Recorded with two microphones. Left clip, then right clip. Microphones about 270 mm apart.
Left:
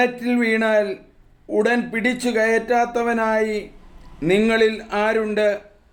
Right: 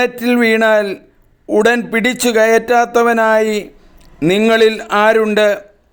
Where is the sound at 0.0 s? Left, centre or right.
Right.